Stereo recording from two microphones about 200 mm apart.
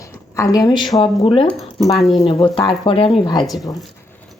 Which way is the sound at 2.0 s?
30° left (ahead or behind).